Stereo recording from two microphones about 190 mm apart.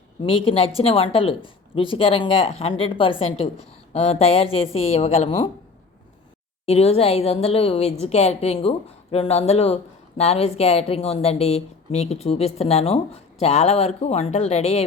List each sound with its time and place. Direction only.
0.2 s a woman's voice: 30° left (ahead or behind)
6.7 s speech: 30° left (ahead or behind)